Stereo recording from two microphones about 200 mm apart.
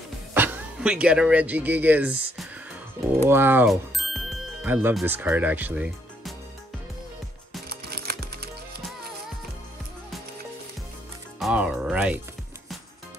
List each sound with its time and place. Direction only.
0.3 s speech: 10° right (ahead or behind)
7.9 s music: 50° right (ahead or behind)
11.3 s music: 5° right (ahead or behind)